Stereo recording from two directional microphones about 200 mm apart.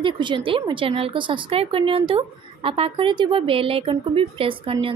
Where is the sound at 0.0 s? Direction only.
25° right (ahead or behind).